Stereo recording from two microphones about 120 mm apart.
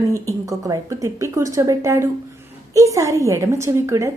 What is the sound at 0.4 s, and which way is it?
A woman's voice, 30° right (ahead or behind).